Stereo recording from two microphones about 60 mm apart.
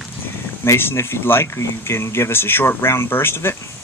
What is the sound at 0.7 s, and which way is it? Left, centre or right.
Speech, left.